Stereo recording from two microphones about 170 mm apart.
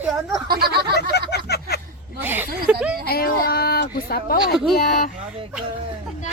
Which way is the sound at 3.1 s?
60° left (ahead or behind).